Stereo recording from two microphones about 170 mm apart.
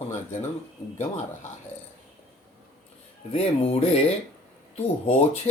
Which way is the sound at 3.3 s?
35° left (ahead or behind).